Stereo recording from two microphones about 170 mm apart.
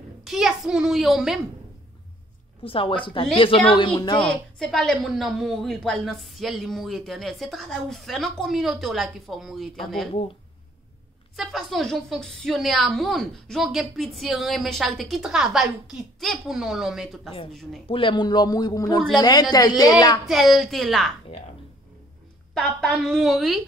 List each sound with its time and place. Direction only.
0.2 s a child's voice: centre (ahead or behind)
2.6 s speech: 30° left (ahead or behind)
4.2 s a woman's voice: 5° left (ahead or behind)
11.3 s a woman's voice: centre (ahead or behind)
17.8 s speech: 30° left (ahead or behind)
20.2 s a woman's voice: centre (ahead or behind)
22.5 s a woman's voice: 5° left (ahead or behind)